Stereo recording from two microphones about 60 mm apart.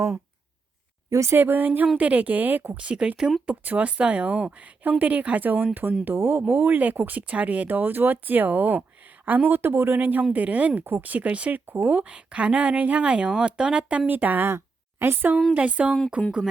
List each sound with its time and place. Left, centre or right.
1.1 s speech: right
1.4 s speech: right
2.8 s speech: centre
3.4 s speech: right
14.1 s speech: right
14.5 s a woman's voice: right
15.5 s speech: right